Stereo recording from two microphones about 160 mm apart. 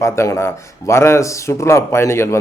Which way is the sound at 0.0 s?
15° left (ahead or behind).